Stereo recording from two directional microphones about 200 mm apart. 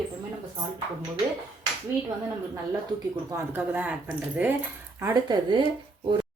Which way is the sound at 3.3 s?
10° right (ahead or behind).